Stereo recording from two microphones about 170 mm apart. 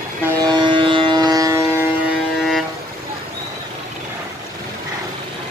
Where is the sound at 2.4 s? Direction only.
Centre (ahead or behind).